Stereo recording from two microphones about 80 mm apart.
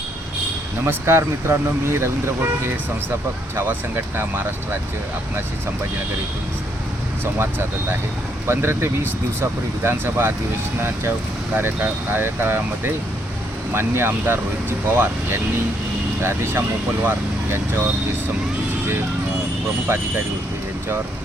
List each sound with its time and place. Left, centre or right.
0.9 s speech: right
3.5 s speech: right
8.4 s speech: right
19.9 s speech: right